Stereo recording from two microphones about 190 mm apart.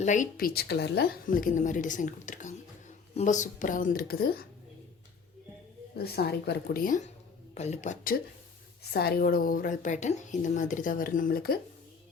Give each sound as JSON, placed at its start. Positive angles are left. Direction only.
{"t": 0.0, "sound": "speech", "side_deg": 40}
{"t": 6.0, "sound": "speech", "side_deg": 55}
{"t": 7.5, "sound": "a woman's voice", "side_deg": 35}
{"t": 8.8, "sound": "speech", "side_deg": 55}